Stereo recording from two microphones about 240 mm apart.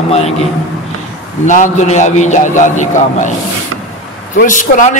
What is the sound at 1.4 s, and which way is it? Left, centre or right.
A man's voice, left.